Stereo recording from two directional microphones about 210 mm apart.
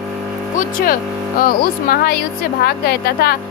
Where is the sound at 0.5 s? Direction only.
45° left (ahead or behind).